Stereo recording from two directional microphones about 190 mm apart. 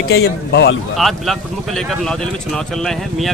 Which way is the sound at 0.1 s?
60° left (ahead or behind).